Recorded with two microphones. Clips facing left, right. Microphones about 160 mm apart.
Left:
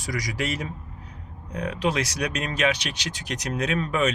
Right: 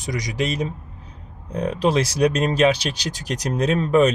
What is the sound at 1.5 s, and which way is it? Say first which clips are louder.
Speech: right 6 dB; 30° right (ahead or behind).